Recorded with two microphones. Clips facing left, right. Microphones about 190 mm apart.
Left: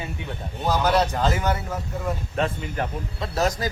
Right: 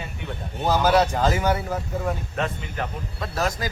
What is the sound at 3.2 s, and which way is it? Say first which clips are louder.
Speech: left 2 dB; 25° left (ahead or behind).